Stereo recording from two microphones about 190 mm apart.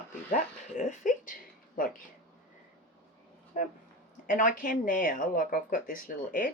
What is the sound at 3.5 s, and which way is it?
Speech, 45° left (ahead or behind).